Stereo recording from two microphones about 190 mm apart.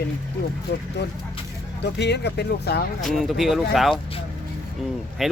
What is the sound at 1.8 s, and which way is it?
Speech, 60° left (ahead or behind).